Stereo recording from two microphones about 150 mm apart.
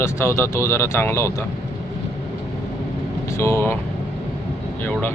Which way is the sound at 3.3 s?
15° left (ahead or behind).